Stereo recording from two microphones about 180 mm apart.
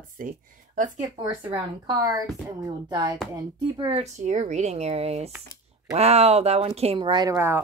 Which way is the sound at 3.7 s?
35° right (ahead or behind).